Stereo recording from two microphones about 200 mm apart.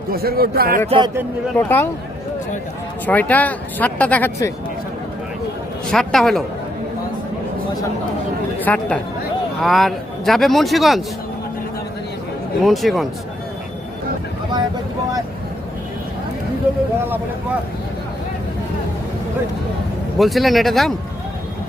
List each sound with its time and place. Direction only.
0.1 s speech: 50° right (ahead or behind)
0.9 s speech: 25° right (ahead or behind)
1.5 s speech: 10° left (ahead or behind)
3.1 s speech: 10° left (ahead or behind)
5.9 s speech: centre (ahead or behind)
8.6 s speech: 5° left (ahead or behind)
12.6 s speech: centre (ahead or behind)
20.1 s speech: centre (ahead or behind)